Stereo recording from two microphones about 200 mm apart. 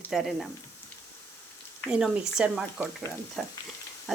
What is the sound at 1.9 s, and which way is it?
Speech, 5° right (ahead or behind).